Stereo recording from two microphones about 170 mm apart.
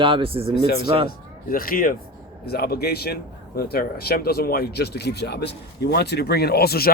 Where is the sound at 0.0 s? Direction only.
30° right (ahead or behind).